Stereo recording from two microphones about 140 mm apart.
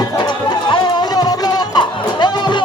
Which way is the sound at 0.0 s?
35° left (ahead or behind).